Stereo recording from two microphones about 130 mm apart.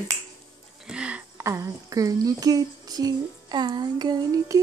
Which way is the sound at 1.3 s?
20° right (ahead or behind).